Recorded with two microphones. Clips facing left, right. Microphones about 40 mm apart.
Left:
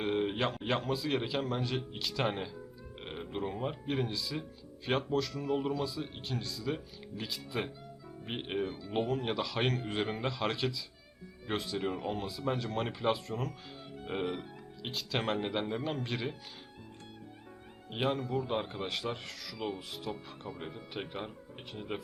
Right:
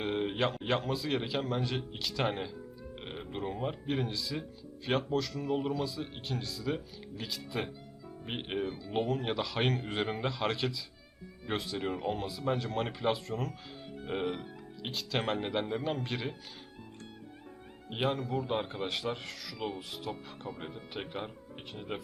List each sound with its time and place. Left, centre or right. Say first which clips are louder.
0.0 s speech: even; centre
17.9 s speech: even; centre